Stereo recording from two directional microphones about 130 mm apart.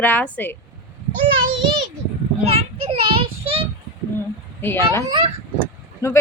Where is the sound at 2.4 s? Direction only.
50° right (ahead or behind).